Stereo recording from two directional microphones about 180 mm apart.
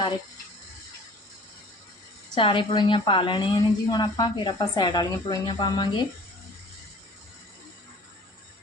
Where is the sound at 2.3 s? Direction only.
30° left (ahead or behind).